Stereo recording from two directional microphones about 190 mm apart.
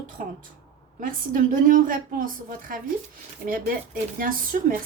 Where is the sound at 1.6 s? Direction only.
45° right (ahead or behind).